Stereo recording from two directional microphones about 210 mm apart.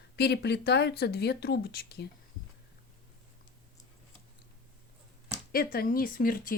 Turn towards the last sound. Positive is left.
turn(degrees=40)  # may be behind; listen again after turning